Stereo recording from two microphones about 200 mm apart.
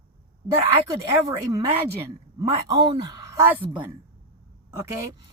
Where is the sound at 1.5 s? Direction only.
15° right (ahead or behind).